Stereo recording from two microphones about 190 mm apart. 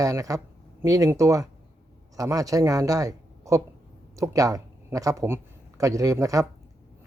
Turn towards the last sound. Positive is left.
turn(degrees=-15)  # may be behind; listen again after turning